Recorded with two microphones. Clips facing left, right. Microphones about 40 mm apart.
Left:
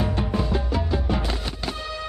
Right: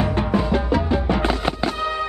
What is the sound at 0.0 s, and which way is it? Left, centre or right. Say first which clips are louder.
Music: right 5 dB; right.